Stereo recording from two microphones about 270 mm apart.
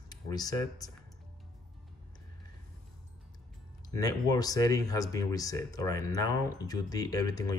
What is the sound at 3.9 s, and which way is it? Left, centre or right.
Speech, centre.